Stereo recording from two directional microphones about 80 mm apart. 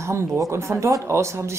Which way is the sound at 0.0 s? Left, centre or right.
Right.